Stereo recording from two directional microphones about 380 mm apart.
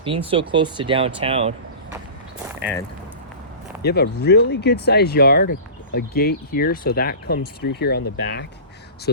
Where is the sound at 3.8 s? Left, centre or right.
Left.